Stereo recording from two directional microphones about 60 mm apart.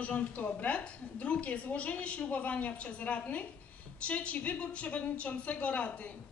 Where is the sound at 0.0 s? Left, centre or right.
Left.